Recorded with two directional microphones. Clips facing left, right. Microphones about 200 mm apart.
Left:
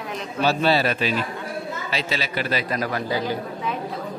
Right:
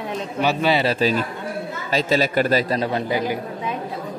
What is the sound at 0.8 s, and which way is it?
Speech, 30° right (ahead or behind).